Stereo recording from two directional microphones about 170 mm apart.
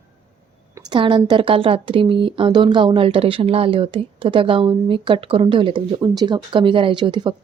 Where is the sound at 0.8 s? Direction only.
25° right (ahead or behind).